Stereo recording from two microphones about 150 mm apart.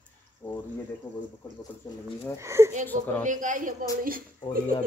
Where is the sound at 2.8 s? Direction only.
10° left (ahead or behind).